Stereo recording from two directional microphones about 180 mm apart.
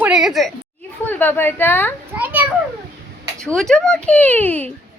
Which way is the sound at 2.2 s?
10° right (ahead or behind).